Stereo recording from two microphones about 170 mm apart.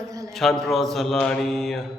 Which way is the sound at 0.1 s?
20° right (ahead or behind).